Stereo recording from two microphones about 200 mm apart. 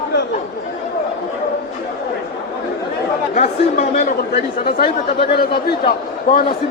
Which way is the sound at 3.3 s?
35° left (ahead or behind).